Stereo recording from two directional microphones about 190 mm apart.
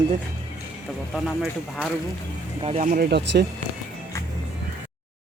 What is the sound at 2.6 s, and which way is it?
Speech, 35° right (ahead or behind).